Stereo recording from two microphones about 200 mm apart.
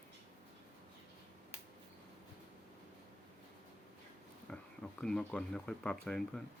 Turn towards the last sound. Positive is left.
turn(degrees=5)  # may be behind; listen again after turning